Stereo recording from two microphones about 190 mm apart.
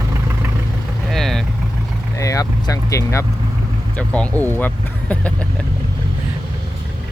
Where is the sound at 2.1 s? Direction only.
15° left (ahead or behind).